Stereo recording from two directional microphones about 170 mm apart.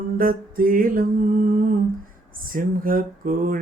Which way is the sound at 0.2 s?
55° right (ahead or behind).